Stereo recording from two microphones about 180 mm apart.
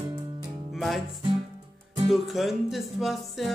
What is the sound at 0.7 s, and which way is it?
Music, centre (ahead or behind).